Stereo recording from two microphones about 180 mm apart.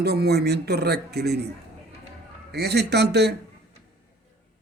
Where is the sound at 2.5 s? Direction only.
65° right (ahead or behind).